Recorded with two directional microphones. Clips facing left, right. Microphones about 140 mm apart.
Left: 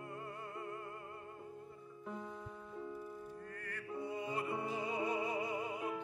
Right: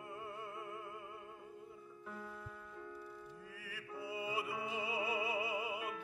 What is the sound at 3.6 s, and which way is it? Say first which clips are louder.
Music: left 4 dB; 5° right (ahead or behind).